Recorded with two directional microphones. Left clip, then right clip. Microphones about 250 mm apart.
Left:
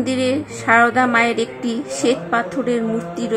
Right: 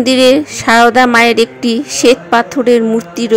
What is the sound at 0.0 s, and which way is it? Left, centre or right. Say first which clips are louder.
A woman's voice: right 12 dB; right.